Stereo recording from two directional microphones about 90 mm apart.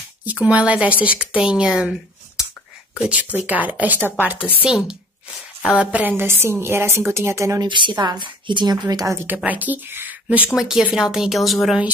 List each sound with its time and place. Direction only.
0.2 s a woman's voice: 15° right (ahead or behind)
3.0 s a woman's voice: 15° right (ahead or behind); by 7.6 s 35° right (ahead or behind)
7.6 s speech: 60° right (ahead or behind)
8.8 s a woman's voice: 40° right (ahead or behind)
9.4 s a woman's voice: 20° right (ahead or behind)
10.5 s speech: 5° right (ahead or behind)